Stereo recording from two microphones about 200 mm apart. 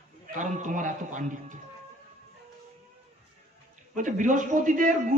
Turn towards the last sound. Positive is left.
turn(degrees=-40)  # may be behind; listen again after turning